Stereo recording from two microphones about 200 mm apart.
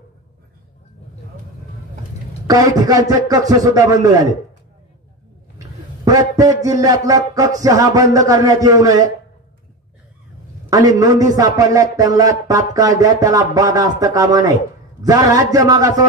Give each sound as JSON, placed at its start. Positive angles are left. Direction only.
{"t": 2.4, "sound": "speech", "side_deg": -20}
{"t": 6.0, "sound": "speech", "side_deg": -15}
{"t": 10.7, "sound": "speech", "side_deg": -20}